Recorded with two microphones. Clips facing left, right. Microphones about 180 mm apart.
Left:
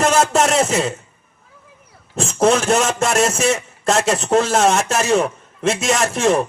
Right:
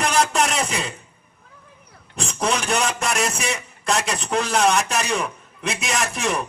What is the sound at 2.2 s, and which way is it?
A man's voice, 25° left (ahead or behind).